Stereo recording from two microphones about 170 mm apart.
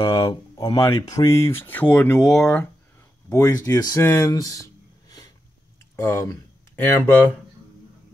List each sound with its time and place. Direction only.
0.1 s speech: 25° left (ahead or behind)
5.9 s speech: 15° left (ahead or behind)